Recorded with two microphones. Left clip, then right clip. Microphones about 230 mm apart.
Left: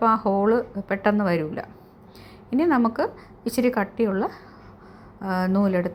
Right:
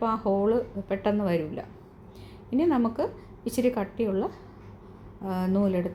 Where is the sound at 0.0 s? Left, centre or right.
Centre.